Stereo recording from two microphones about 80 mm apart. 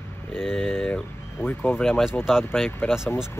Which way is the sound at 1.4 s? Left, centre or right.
Left.